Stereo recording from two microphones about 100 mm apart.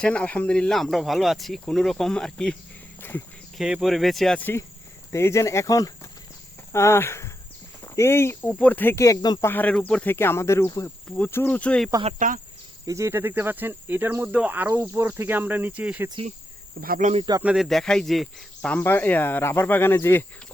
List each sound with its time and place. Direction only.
0.0 s speech: 10° left (ahead or behind)
3.0 s speech: 20° left (ahead or behind)
3.6 s speech: 5° right (ahead or behind)
4.4 s speech: 20° left (ahead or behind)
5.1 s speech: 30° left (ahead or behind)
6.7 s speech: 25° left (ahead or behind)
9.0 s speech: 40° left (ahead or behind)
9.4 s speech: 20° left (ahead or behind)
12.8 s speech: 30° right (ahead or behind); by 16.0 s 15° right (ahead or behind)
17.4 s speech: 10° right (ahead or behind)
17.7 s speech: 5° left (ahead or behind)
18.7 s speech: 20° left (ahead or behind)